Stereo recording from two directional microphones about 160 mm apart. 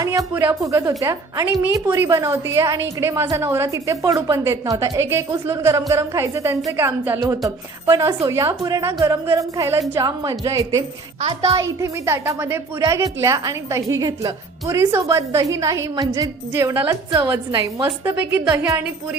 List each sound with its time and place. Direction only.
0.3 s a woman's voice: 15° right (ahead or behind)
17.5 s a woman's voice: 25° right (ahead or behind)
18.2 s a woman's voice: 10° right (ahead or behind)